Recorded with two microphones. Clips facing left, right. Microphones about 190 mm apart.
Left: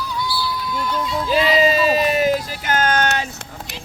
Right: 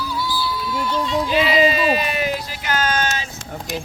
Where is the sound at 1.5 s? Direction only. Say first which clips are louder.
Left 2 dB; 40° left (ahead or behind).